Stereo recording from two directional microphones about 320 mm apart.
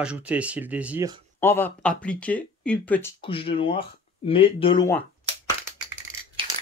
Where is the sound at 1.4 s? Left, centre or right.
Centre.